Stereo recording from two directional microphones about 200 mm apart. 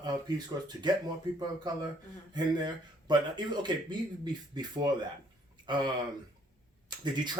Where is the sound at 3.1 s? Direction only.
20° right (ahead or behind).